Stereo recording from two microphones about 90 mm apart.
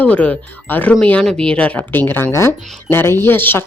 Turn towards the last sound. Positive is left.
turn(degrees=25)  # may be behind; listen again after turning